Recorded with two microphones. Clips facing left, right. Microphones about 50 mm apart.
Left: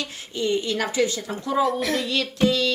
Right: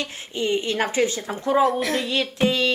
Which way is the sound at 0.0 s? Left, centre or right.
Right.